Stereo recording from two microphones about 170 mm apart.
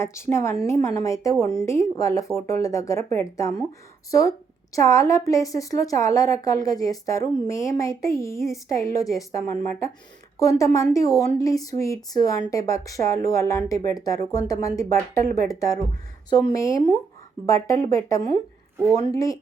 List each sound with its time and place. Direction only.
0.0 s a woman's voice: 15° left (ahead or behind)
10.4 s a woman's voice: 20° left (ahead or behind)